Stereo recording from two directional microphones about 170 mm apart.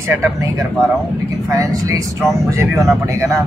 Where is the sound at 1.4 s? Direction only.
20° right (ahead or behind).